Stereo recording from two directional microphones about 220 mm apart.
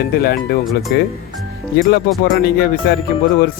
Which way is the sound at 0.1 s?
45° left (ahead or behind).